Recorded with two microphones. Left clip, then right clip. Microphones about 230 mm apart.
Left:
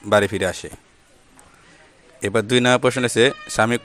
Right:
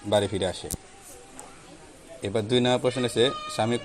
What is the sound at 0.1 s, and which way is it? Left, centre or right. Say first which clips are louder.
Speech: left 7 dB; left.